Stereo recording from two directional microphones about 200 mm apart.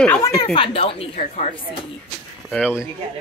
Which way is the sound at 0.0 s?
10° left (ahead or behind).